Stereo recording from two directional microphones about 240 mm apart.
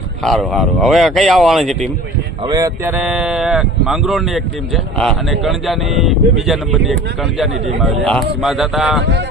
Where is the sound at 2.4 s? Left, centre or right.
Centre.